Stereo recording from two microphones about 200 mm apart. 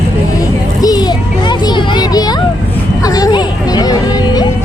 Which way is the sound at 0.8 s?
20° left (ahead or behind).